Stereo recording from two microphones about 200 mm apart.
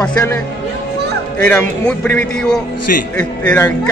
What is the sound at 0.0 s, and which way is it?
Speech, 10° left (ahead or behind).